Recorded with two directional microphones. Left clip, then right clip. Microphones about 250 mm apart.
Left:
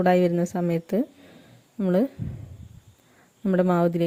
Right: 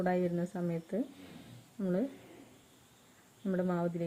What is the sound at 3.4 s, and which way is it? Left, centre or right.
Speech, left.